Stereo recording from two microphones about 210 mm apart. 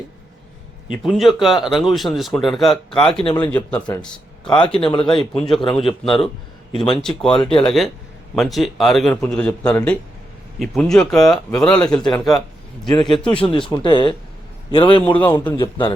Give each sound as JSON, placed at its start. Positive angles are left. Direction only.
{"t": 1.0, "sound": "speech", "side_deg": 0}
{"t": 3.8, "sound": "speech", "side_deg": 20}
{"t": 5.3, "sound": "speech", "side_deg": 0}
{"t": 5.8, "sound": "speech", "side_deg": 25}
{"t": 7.0, "sound": "speech", "side_deg": 5}
{"t": 12.9, "sound": "speech", "side_deg": 20}
{"t": 15.0, "sound": "a man's voice", "side_deg": 5}
{"t": 15.5, "sound": "speech", "side_deg": 20}